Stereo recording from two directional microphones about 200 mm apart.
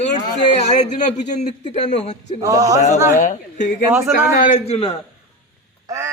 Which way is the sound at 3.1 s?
40° left (ahead or behind).